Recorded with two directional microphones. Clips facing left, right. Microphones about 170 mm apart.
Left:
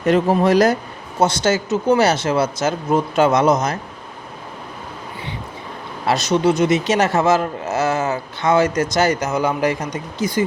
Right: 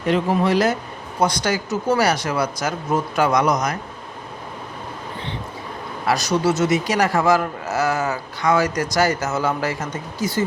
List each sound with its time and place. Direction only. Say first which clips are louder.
0.0 s speech: left 4 dB; 45° left (ahead or behind)
1.2 s a man's voice: left 3 dB; 25° left (ahead or behind)
6.1 s a man's voice: left 3 dB; 20° left (ahead or behind)